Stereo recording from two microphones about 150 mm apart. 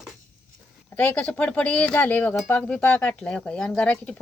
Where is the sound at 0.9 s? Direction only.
10° left (ahead or behind).